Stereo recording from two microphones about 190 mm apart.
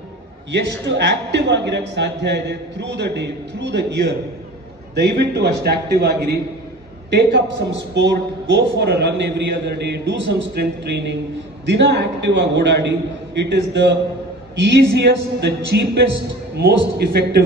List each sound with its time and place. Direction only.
0.5 s a man's voice: 65° right (ahead or behind)